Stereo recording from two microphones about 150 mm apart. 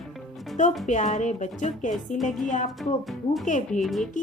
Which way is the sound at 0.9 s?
55° left (ahead or behind).